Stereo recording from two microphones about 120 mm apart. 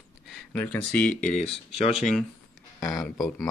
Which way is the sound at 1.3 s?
55° left (ahead or behind).